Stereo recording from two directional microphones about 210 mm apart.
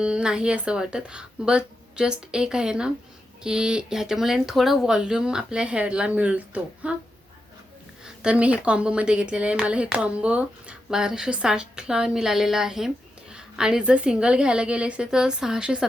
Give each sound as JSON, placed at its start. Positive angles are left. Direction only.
{"t": 0.0, "sound": "speech", "side_deg": -5}
{"t": 8.0, "sound": "a woman's voice", "side_deg": -5}